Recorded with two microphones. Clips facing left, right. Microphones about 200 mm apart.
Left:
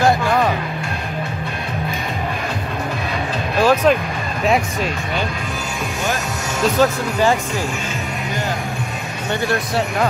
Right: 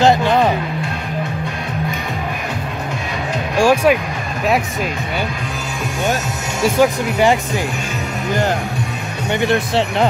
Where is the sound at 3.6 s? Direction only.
10° right (ahead or behind).